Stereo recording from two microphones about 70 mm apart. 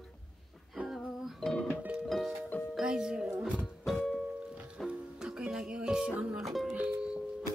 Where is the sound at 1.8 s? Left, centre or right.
Centre.